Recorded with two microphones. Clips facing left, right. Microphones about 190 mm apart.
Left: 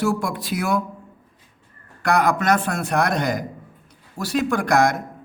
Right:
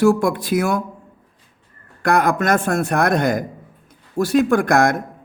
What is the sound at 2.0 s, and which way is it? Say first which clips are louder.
A man's voice: right 2 dB; 50° right (ahead or behind).